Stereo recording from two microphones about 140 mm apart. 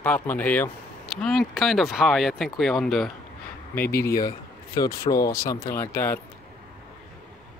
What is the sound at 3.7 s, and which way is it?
Speech, 15° left (ahead or behind).